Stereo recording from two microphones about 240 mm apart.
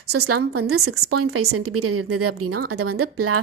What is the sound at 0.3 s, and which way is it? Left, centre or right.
A woman's voice, right.